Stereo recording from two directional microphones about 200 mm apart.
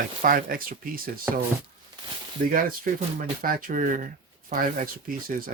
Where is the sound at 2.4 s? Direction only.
50° right (ahead or behind).